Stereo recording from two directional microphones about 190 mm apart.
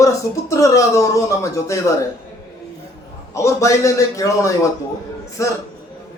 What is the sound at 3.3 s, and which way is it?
Speech, 15° left (ahead or behind).